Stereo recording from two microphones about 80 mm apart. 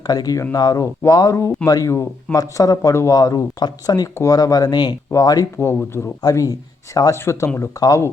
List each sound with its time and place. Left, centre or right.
0.1 s speech: left
3.2 s speech: left
5.5 s speech: left
6.2 s speech: left
7.8 s speech: left